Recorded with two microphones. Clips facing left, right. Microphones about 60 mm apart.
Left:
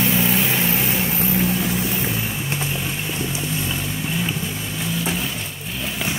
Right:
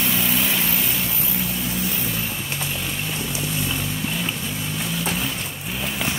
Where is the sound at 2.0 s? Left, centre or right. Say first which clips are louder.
Left 3 dB; centre.